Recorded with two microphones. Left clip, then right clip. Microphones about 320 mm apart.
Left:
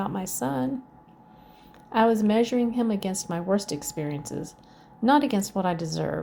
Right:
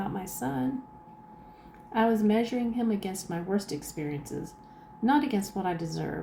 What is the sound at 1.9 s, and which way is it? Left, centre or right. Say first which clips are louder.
Speech: left 4 dB; left.